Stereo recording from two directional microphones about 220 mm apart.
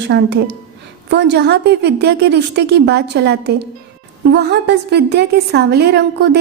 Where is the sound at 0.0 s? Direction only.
50° right (ahead or behind).